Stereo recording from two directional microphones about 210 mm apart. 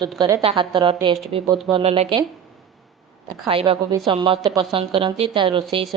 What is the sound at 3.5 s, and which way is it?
A woman's voice, 25° right (ahead or behind).